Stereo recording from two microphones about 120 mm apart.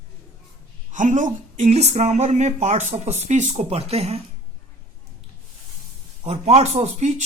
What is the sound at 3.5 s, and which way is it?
Speech, 60° right (ahead or behind).